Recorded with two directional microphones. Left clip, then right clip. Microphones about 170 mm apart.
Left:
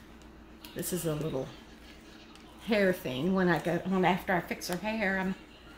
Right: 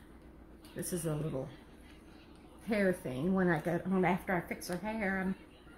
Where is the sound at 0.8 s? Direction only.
20° left (ahead or behind).